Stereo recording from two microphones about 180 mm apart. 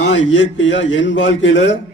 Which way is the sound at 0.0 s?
90° left.